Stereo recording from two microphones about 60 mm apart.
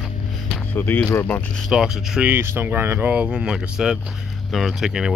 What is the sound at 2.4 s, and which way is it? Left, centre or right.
Speech, right.